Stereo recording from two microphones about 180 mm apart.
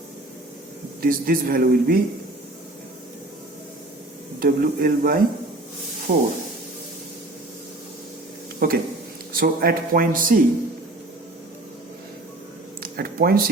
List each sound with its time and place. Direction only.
1.0 s speech: 50° right (ahead or behind)
4.4 s speech: 55° right (ahead or behind)
8.5 s speech: 50° right (ahead or behind)
12.8 s a sound: 55° right (ahead or behind)